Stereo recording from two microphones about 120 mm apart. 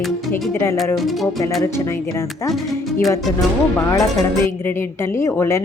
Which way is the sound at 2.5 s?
Centre (ahead or behind).